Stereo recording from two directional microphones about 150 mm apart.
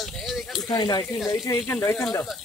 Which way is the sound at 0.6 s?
25° left (ahead or behind).